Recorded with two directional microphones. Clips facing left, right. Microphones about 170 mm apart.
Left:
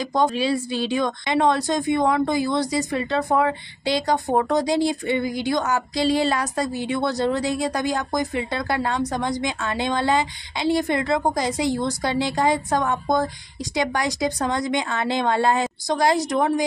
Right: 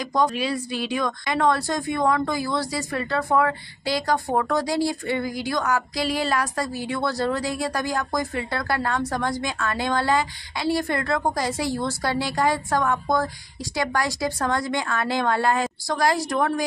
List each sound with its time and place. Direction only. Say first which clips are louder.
0.1 s a woman's voice: left 2 dB; 25° left (ahead or behind)